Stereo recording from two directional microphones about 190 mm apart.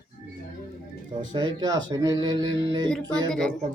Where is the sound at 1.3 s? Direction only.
20° right (ahead or behind).